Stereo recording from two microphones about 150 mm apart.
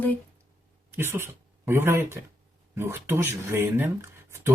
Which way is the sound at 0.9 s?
15° right (ahead or behind).